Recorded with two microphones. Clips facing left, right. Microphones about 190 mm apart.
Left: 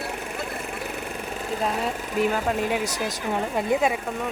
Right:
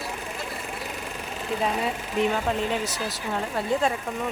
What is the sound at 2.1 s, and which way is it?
Speech, 5° left (ahead or behind).